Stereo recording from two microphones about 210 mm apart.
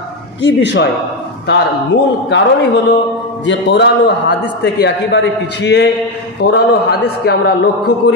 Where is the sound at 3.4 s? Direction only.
55° left (ahead or behind).